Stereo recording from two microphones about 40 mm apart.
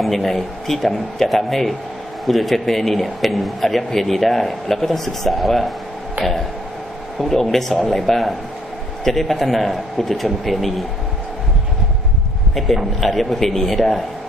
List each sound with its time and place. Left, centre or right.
0.0 s speech: centre
7.2 s speech: centre
12.5 s speech: centre